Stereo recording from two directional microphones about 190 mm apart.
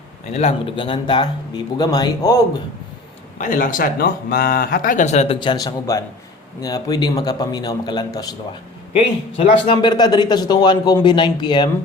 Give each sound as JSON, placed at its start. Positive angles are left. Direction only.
{"t": 0.3, "sound": "speech", "side_deg": 30}
{"t": 3.3, "sound": "speech", "side_deg": 45}
{"t": 9.4, "sound": "speech", "side_deg": 25}